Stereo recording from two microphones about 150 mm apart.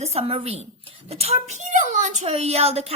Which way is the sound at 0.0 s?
40° right (ahead or behind).